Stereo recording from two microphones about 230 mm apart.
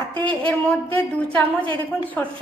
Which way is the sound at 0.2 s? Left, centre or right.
Right.